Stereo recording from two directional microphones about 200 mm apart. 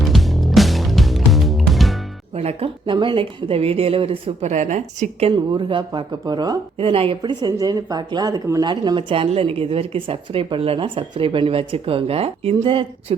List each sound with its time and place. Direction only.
0.0 s music: centre (ahead or behind)
2.3 s speech: 30° right (ahead or behind)
5.3 s speech: 25° right (ahead or behind)